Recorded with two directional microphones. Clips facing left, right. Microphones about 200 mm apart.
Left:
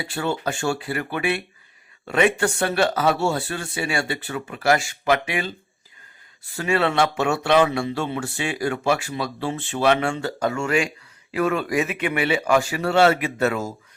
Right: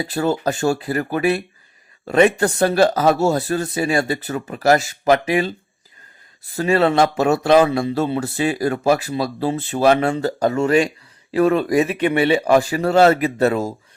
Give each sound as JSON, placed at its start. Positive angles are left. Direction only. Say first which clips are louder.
{"t": 0.0, "sound": "speech", "louder": "right 6 dB", "side_deg": -40}
{"t": 6.6, "sound": "speech", "louder": "right 5 dB", "side_deg": -35}